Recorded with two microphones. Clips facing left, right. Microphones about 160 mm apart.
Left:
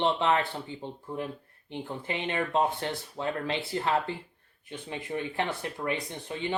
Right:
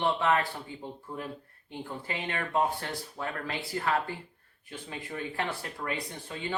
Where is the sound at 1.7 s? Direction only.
25° left (ahead or behind).